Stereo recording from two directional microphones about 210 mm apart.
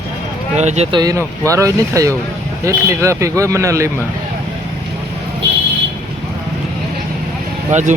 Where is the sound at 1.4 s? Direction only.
15° right (ahead or behind).